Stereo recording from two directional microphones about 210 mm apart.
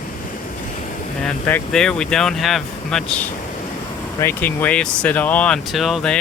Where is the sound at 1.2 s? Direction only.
5° left (ahead or behind).